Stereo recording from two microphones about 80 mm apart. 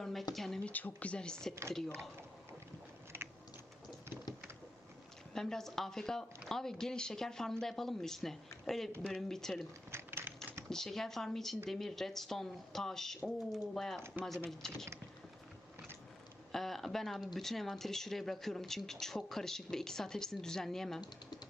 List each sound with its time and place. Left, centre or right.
0.0 s a sound: centre
0.6 s speech: left
3.1 s biting: right
5.3 s speech: centre
9.9 s typewriter: right
10.7 s speech: centre
16.5 s speech: centre